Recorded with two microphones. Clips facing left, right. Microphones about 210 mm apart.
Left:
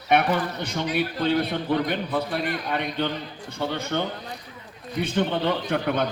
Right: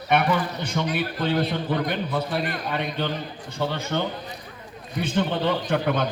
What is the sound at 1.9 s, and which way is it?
Speech, 55° left (ahead or behind).